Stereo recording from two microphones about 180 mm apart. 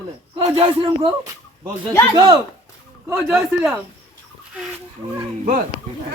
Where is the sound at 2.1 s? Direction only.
25° right (ahead or behind).